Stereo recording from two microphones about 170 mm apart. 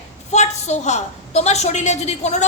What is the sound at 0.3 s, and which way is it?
A woman's voice, 40° left (ahead or behind).